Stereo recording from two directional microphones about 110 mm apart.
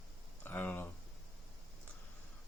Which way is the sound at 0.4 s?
15° left (ahead or behind).